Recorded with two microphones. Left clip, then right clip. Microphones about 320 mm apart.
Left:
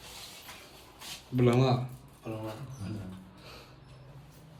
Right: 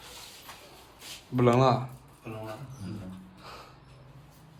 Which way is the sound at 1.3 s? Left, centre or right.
Centre.